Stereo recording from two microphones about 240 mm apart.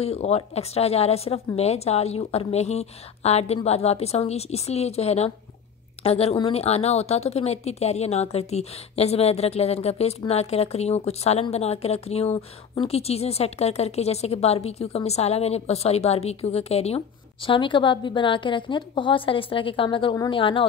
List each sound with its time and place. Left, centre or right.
0.0 s a woman's voice: left